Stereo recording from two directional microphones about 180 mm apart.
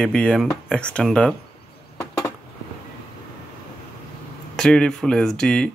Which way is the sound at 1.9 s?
20° left (ahead or behind).